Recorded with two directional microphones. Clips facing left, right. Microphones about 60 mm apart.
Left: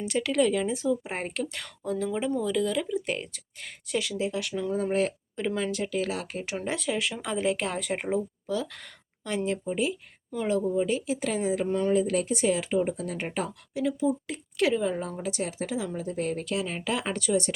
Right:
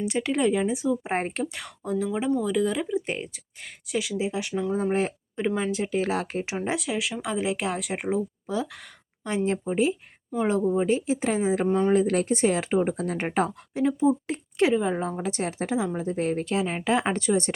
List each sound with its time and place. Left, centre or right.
0.0 s speech: right
1.0 s speech: right
1.5 s speech: centre
5.5 s speech: centre; by 6.4 s right
6.4 s speech: right
6.7 s speech: centre
8.4 s speech: right
9.5 s speech: right
10.3 s speech: right
10.7 s speech: right
11.9 s speech: right